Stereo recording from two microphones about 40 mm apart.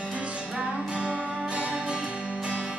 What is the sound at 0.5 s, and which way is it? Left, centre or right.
Music, right.